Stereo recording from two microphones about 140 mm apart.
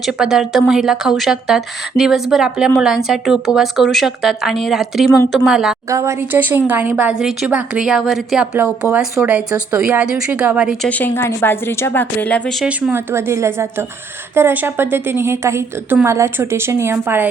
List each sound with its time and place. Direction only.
0.0 s speech: 5° right (ahead or behind)
5.9 s speech: 20° right (ahead or behind); by 8.4 s centre (ahead or behind)
8.5 s speech: 15° right (ahead or behind)
10.8 s a woman's voice: 10° left (ahead or behind)
12.6 s speech: 15° right (ahead or behind)